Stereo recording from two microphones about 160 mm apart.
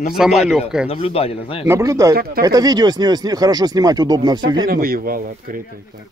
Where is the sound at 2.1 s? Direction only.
70° right (ahead or behind).